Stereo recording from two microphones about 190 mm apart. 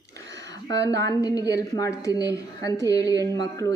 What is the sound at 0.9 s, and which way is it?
A woman's voice, 15° left (ahead or behind).